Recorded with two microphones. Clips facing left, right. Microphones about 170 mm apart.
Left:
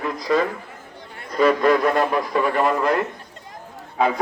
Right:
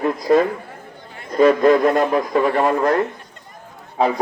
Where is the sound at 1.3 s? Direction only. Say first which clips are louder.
Right 4 dB; 45° right (ahead or behind).